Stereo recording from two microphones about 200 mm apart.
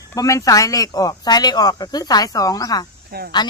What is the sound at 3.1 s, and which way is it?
Speech, 50° right (ahead or behind).